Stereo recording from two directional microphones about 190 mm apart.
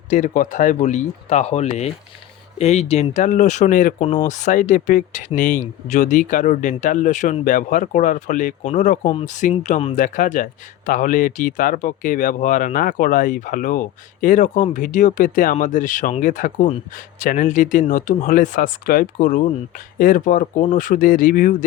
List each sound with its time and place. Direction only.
0.1 s speech: 40° left (ahead or behind)